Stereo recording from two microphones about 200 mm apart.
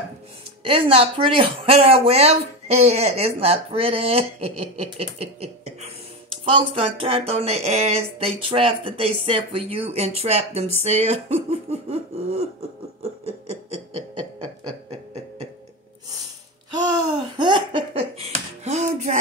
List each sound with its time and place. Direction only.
0.7 s speech: 25° right (ahead or behind)
6.5 s speech: 30° right (ahead or behind)
16.7 s laughter: 20° right (ahead or behind)
18.6 s music: 35° right (ahead or behind)